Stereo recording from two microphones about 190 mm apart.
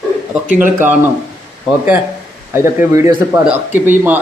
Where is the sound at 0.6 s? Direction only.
10° right (ahead or behind).